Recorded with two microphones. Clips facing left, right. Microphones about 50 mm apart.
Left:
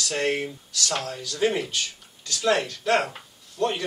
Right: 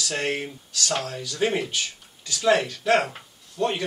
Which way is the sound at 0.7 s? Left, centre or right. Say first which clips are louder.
Right 1 dB; right.